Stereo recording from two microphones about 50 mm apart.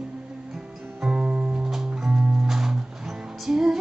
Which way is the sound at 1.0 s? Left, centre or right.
Centre.